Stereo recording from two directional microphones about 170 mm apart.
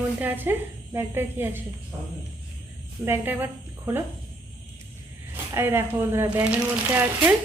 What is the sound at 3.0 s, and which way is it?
Speech, 10° right (ahead or behind).